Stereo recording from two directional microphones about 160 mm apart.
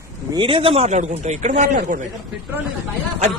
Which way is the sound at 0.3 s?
30° right (ahead or behind).